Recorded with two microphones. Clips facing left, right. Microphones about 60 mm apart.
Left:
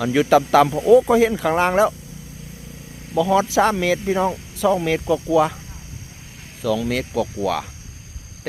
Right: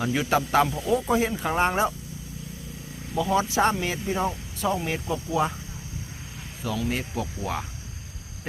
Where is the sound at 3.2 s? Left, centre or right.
Left.